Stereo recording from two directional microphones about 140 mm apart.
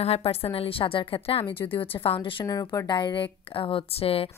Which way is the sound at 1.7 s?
40° left (ahead or behind).